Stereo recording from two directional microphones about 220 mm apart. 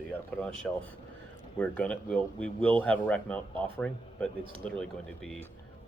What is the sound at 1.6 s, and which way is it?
Speech, 5° left (ahead or behind).